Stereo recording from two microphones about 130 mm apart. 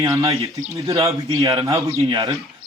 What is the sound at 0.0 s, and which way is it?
Speech, 25° right (ahead or behind).